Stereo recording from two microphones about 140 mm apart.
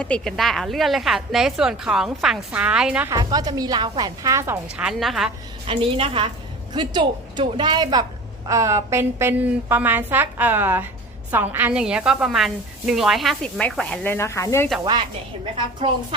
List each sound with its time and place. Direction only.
0.0 s a woman's voice: 5° left (ahead or behind)
3.1 s speech: 30° right (ahead or behind)
4.8 s a woman's voice: centre (ahead or behind)
5.6 s a woman's voice: 40° right (ahead or behind); by 14.1 s 5° left (ahead or behind)
14.1 s speech: 20° left (ahead or behind)